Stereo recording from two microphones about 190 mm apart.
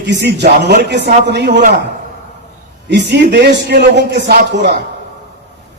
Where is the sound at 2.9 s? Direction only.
65° right (ahead or behind).